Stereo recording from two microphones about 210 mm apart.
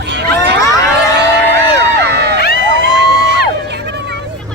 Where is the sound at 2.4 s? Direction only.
50° left (ahead or behind).